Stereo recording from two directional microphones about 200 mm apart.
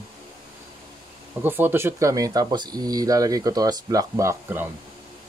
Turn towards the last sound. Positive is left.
turn(degrees=-10)  # may be behind; listen again after turning